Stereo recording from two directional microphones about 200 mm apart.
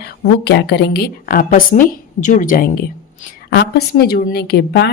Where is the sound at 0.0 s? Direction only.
55° left (ahead or behind).